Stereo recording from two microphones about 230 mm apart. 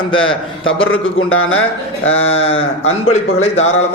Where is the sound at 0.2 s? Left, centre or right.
Left.